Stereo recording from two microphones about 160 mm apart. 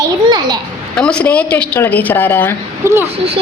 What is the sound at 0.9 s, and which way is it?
A woman's voice, 5° left (ahead or behind).